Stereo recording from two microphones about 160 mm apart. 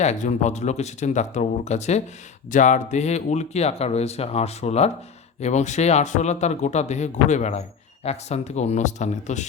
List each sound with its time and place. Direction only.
0.0 s speech: 45° left (ahead or behind)